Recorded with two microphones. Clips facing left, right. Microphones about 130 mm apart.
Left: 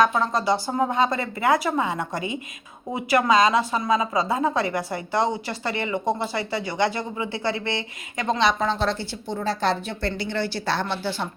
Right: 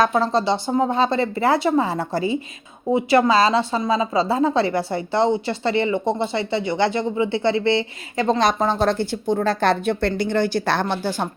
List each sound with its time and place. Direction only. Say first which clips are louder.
0.0 s speech: right 3 dB; 35° right (ahead or behind)
8.4 s a woman's voice: right 4 dB; 45° right (ahead or behind)